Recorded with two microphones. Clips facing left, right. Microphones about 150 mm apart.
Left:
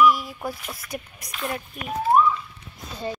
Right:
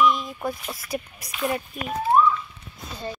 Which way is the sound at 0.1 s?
5° left (ahead or behind).